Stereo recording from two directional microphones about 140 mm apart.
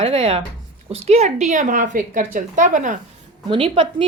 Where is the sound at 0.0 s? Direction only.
40° right (ahead or behind); by 3.0 s 65° right (ahead or behind).